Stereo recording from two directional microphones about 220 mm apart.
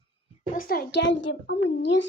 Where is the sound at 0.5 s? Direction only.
40° left (ahead or behind).